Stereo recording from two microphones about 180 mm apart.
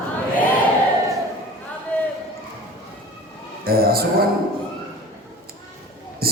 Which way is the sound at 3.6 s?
55° right (ahead or behind).